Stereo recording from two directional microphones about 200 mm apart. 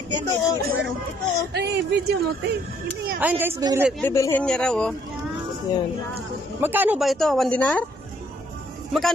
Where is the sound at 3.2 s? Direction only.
10° right (ahead or behind).